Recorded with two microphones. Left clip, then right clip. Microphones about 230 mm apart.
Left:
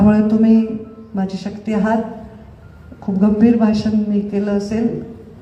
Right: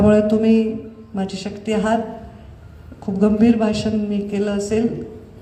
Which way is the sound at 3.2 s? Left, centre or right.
Right.